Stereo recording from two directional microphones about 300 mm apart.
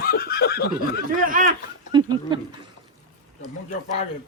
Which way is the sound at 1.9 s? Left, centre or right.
Centre.